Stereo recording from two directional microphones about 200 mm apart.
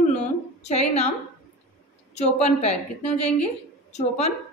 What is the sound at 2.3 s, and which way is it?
Speech, 35° left (ahead or behind).